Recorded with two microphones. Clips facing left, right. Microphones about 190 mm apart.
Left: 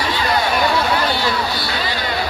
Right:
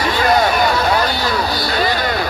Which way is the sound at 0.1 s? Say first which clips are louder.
Right 5 dB; 45° right (ahead or behind).